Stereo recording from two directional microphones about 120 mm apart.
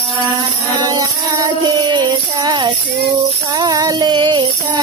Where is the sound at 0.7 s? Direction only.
35° right (ahead or behind).